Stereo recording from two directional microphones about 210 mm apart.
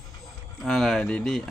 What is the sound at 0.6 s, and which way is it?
Speech, centre (ahead or behind).